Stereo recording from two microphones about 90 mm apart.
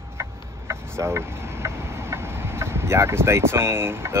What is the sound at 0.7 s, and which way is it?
Vehicle, 30° right (ahead or behind).